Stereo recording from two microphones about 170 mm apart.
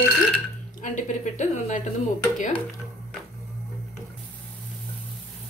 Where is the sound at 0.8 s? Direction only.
45° left (ahead or behind).